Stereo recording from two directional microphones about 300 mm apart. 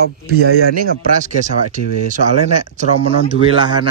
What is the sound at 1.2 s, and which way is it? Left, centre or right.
Speech, right.